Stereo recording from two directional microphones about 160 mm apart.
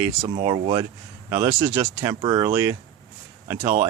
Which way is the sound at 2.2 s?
30° right (ahead or behind).